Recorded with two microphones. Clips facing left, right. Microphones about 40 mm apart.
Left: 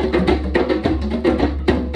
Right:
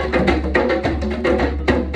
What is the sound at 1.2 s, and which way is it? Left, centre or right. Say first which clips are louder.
Music: even; right.